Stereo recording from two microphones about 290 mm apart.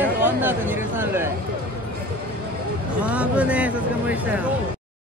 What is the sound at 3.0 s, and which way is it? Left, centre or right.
Speech, centre.